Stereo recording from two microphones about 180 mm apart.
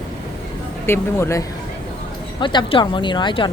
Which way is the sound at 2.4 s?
25° left (ahead or behind).